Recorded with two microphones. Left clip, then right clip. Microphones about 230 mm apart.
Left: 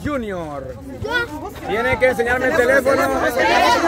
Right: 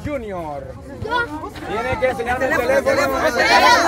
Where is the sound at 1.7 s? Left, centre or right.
Left.